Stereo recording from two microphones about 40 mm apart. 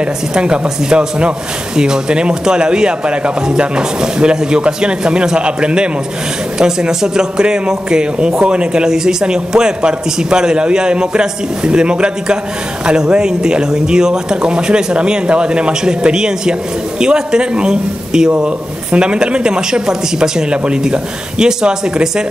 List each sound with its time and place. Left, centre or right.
0.0 s speech: right